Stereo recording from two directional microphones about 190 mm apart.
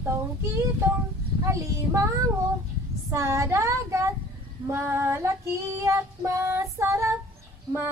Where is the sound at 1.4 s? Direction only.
15° right (ahead or behind).